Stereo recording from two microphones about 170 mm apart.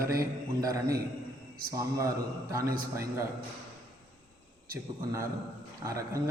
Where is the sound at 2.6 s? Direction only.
55° right (ahead or behind).